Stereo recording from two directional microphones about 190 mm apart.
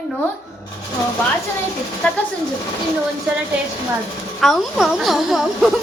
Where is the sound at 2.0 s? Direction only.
10° left (ahead or behind).